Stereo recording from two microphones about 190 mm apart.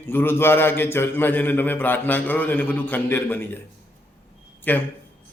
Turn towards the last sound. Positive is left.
turn(degrees=10)  # may be behind; listen again after turning